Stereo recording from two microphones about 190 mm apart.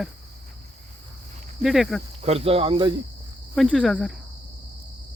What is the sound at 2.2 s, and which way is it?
Speech, 30° right (ahead or behind).